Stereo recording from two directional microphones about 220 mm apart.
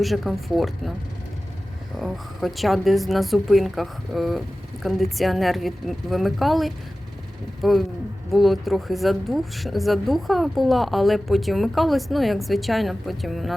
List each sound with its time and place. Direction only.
0.0 s a woman's voice: centre (ahead or behind)
2.0 s a woman's voice: centre (ahead or behind)